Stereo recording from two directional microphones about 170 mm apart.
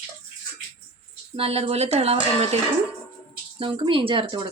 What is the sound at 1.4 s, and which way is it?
Speech, 35° right (ahead or behind).